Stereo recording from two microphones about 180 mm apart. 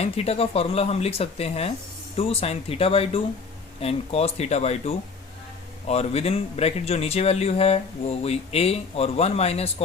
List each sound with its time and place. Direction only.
0.0 s speech: 35° left (ahead or behind)